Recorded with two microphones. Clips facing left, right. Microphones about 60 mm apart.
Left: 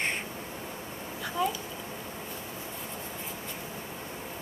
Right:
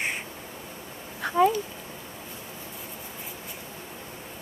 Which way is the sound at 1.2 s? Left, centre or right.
Right.